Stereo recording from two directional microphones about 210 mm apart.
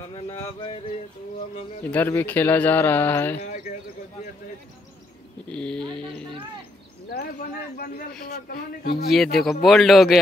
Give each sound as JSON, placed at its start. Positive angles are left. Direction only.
{"t": 1.9, "sound": "speech", "side_deg": 10}
{"t": 3.3, "sound": "speech", "side_deg": 45}
{"t": 5.5, "sound": "speech", "side_deg": 5}
{"t": 8.3, "sound": "speech", "side_deg": 45}
{"t": 9.1, "sound": "speech", "side_deg": 0}